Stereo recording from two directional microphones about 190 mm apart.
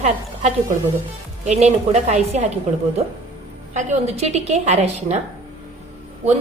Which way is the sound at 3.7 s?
40° right (ahead or behind).